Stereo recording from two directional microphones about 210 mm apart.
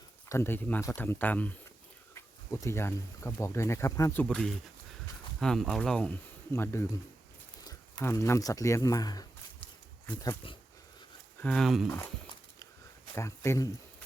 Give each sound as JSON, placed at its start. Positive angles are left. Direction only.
{"t": 0.3, "sound": "speech", "side_deg": 10}
{"t": 11.3, "sound": "speech", "side_deg": 5}
{"t": 13.1, "sound": "speech", "side_deg": 15}